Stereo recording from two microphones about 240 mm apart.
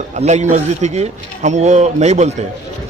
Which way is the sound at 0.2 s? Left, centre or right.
Right.